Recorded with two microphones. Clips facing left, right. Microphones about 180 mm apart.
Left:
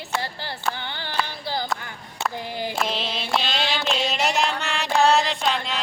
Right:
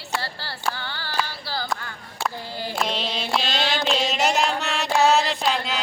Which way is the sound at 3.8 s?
Centre (ahead or behind).